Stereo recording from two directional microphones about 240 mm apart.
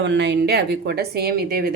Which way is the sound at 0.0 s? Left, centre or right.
Right.